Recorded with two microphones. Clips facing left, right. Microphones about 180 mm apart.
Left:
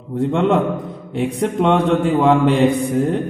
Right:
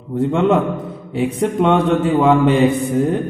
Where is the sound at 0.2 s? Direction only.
Centre (ahead or behind).